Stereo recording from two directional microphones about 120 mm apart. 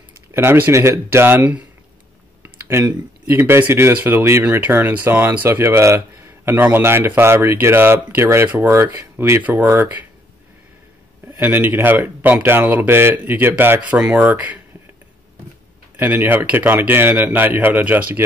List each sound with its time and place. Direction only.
0.3 s speech: 20° right (ahead or behind)
11.3 s speech: 15° right (ahead or behind)
16.0 s speech: 15° right (ahead or behind)